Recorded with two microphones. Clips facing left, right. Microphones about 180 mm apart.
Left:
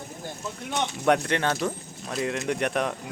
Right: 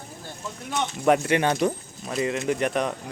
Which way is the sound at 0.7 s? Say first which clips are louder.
Right 2 dB; centre (ahead or behind).